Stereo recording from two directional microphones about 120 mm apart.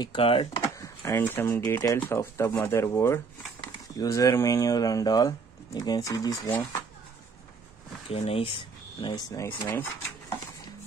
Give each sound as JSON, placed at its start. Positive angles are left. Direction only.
{"t": 0.0, "sound": "speech", "side_deg": 45}
{"t": 0.7, "sound": "speech", "side_deg": 25}
{"t": 8.1, "sound": "speech", "side_deg": 55}
{"t": 9.1, "sound": "speech", "side_deg": 30}